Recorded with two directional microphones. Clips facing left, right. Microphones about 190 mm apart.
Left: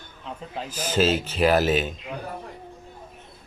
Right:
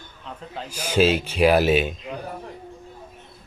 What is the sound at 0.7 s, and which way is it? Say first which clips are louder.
Speech: right 3 dB; 10° right (ahead or behind).